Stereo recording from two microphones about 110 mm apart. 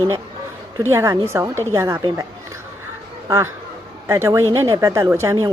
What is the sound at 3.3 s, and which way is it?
A man's voice, 25° right (ahead or behind).